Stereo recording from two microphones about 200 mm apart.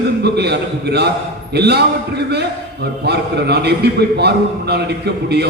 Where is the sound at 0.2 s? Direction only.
55° right (ahead or behind).